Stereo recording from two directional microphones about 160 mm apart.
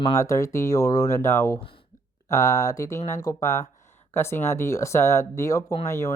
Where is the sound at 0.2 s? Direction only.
20° left (ahead or behind).